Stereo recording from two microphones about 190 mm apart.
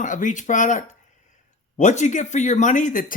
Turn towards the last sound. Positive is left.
turn(degrees=45)  # may be behind; listen again after turning